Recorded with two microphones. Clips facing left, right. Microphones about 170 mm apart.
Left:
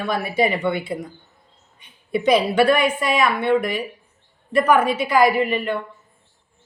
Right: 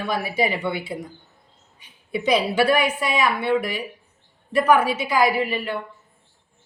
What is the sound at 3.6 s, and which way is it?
Speech, 50° left (ahead or behind).